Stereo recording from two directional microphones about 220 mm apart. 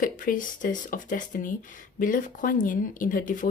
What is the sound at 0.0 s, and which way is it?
Speech, 40° left (ahead or behind).